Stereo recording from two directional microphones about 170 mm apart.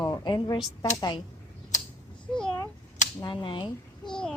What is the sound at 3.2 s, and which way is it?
Speech, 30° left (ahead or behind).